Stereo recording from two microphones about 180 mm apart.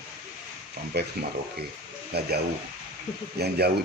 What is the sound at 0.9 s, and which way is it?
Speech, 70° right (ahead or behind).